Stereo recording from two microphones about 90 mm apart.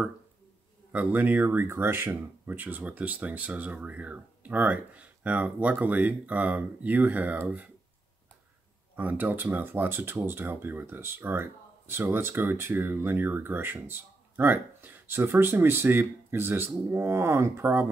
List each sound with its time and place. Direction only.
0.9 s speech: 20° right (ahead or behind)
8.9 s speech: 20° right (ahead or behind)